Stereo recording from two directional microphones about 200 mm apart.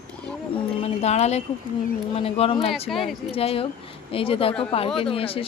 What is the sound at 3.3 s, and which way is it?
A woman's voice, 30° left (ahead or behind).